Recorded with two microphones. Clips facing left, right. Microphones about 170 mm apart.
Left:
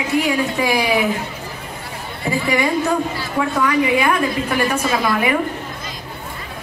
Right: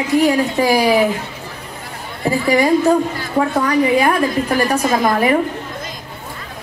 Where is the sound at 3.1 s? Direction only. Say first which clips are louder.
Right 3 dB; 40° right (ahead or behind).